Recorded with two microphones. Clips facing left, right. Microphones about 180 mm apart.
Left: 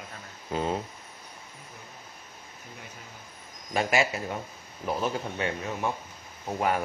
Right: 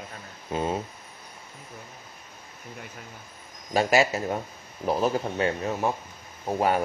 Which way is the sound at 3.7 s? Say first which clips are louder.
Right 4 dB; 35° right (ahead or behind).